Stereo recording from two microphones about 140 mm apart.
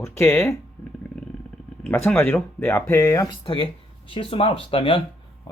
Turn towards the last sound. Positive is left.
turn(degrees=40)  # may be behind; listen again after turning